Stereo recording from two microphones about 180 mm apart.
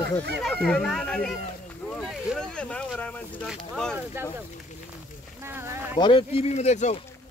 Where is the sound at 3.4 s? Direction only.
Centre (ahead or behind).